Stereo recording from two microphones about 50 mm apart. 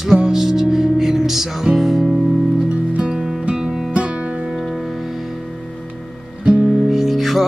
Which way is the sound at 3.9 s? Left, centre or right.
Right.